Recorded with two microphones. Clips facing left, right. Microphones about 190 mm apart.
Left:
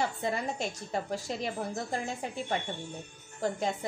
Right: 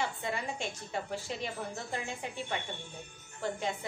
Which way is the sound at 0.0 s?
40° left (ahead or behind).